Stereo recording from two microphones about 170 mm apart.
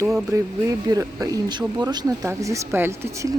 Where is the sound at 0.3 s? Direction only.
15° right (ahead or behind).